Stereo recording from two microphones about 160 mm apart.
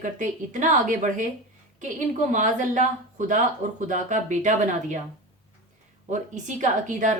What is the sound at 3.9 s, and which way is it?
A woman's voice, 50° right (ahead or behind).